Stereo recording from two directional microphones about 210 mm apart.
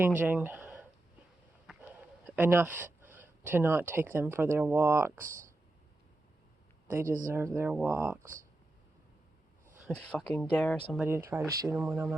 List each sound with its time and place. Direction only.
0.2 s speech: 10° right (ahead or behind)
1.7 s a sound: 5° right (ahead or behind)
2.2 s speech: 10° right (ahead or behind)
5.2 s speech: 40° right (ahead or behind)
7.0 s speech: 40° right (ahead or behind)
7.3 s speech: 10° right (ahead or behind)
8.2 s speech: 40° right (ahead or behind)
9.8 s speech: 5° left (ahead or behind)
10.9 s speech: 10° right (ahead or behind)